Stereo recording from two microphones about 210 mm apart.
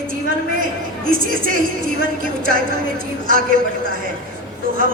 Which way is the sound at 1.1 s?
40° right (ahead or behind).